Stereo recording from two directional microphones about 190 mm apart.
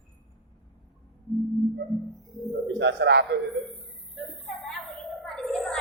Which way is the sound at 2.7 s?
65° right (ahead or behind).